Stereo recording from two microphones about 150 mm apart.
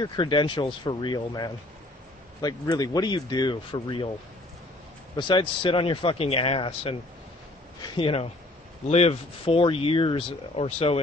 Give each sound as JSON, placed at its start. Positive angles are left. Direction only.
{"t": 0.0, "sound": "speech", "side_deg": 30}
{"t": 5.1, "sound": "speech", "side_deg": 35}